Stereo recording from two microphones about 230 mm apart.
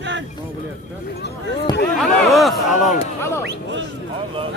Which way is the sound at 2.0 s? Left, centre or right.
Centre.